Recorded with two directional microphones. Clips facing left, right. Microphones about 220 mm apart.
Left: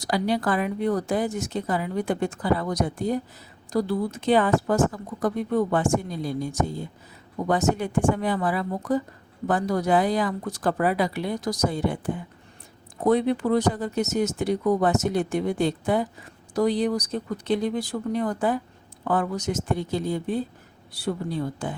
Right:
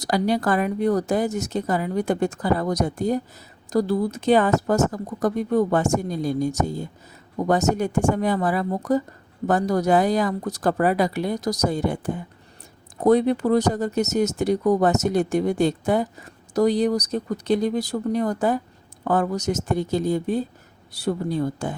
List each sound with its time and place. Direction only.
0.0 s speech: 45° right (ahead or behind)